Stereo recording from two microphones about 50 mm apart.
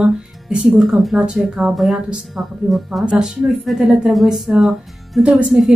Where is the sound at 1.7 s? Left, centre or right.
Centre.